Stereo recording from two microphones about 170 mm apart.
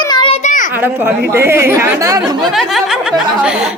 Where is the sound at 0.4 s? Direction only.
50° left (ahead or behind).